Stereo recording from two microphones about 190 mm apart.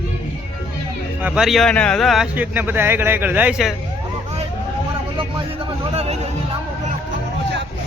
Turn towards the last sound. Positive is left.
turn(degrees=-30)  # may be behind; listen again after turning